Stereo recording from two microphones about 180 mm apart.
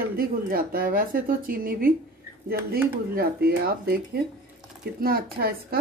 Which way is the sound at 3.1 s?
60° right (ahead or behind).